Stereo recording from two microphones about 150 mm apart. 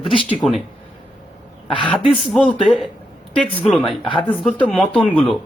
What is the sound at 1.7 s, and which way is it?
Speech, 35° left (ahead or behind).